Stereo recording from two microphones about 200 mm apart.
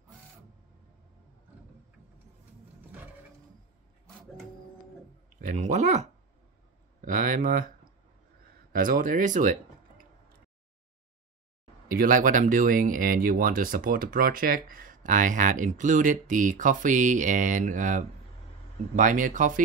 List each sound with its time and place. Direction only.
5.5 s speech: 35° right (ahead or behind)
8.7 s speech: 40° right (ahead or behind)
11.9 s speech: 45° right (ahead or behind)